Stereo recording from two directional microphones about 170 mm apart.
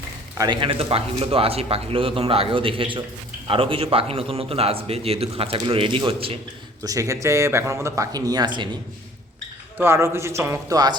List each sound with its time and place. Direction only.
0.3 s a man's voice: 25° right (ahead or behind)
6.8 s speech: 20° right (ahead or behind)
9.7 s speech: 15° right (ahead or behind)